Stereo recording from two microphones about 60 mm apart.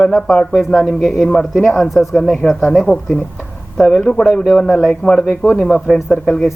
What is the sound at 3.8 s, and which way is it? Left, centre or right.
Speech, centre.